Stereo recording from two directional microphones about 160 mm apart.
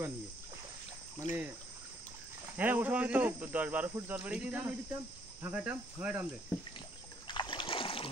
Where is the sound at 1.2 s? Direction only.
50° left (ahead or behind).